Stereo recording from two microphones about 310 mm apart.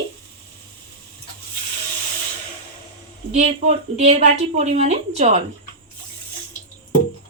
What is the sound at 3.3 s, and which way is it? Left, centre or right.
A woman's voice, right.